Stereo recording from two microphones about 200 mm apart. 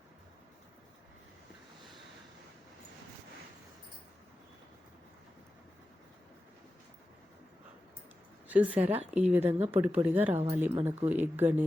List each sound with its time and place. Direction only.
8.4 s a woman's voice: 5° right (ahead or behind)
8.8 s speech: 30° right (ahead or behind)
9.3 s speech: 10° right (ahead or behind)